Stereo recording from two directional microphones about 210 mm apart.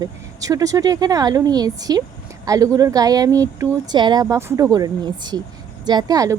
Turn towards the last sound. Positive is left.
turn(degrees=-15)  # may be behind; listen again after turning